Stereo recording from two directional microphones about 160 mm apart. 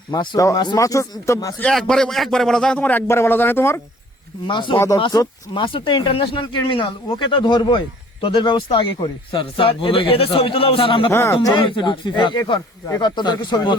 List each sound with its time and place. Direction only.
0.1 s speech: 25° left (ahead or behind)
1.5 s a man's voice: 5° left (ahead or behind)
4.4 s speech: 30° left (ahead or behind)
11.1 s speech: 15° left (ahead or behind)
11.3 s speech: 30° left (ahead or behind)